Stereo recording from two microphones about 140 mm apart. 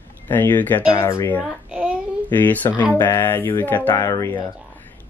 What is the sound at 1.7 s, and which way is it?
Child singing, 5° right (ahead or behind).